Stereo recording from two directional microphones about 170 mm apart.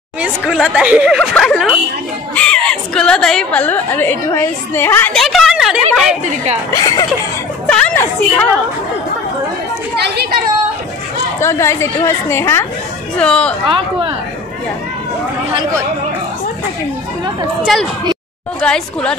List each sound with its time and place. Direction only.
0.2 s a woman's voice: 5° right (ahead or behind); by 5.1 s 15° left (ahead or behind)
5.1 s speech: centre (ahead or behind)
6.7 s speech: 20° left (ahead or behind)
7.6 s a woman's voice: 5° left (ahead or behind)
9.9 s speech: 75° right (ahead or behind)
11.3 s a woman's voice: 15° left (ahead or behind)
13.7 s speech: 30° right (ahead or behind)
17.7 s speech: centre (ahead or behind)